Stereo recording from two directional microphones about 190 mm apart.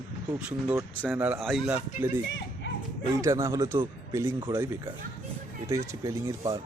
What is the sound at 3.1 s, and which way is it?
Speech, 15° right (ahead or behind).